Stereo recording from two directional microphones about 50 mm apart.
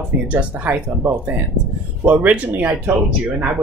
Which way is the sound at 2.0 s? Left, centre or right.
Right.